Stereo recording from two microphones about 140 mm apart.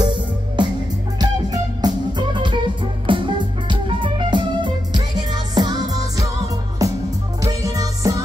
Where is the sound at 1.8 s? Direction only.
35° right (ahead or behind).